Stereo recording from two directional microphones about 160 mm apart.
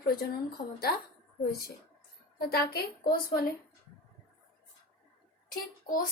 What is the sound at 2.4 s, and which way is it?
Speech, 75° left (ahead or behind).